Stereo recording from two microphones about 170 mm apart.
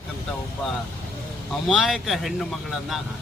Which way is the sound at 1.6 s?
Centre (ahead or behind).